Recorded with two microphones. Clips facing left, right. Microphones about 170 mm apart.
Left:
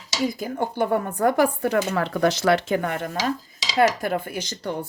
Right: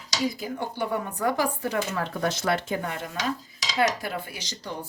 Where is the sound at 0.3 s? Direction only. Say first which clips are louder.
Left 6 dB; 50° left (ahead or behind).